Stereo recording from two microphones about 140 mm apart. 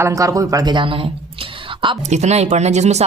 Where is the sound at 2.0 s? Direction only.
55° right (ahead or behind).